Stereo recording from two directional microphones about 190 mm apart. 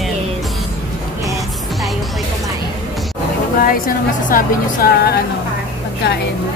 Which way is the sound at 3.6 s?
45° left (ahead or behind).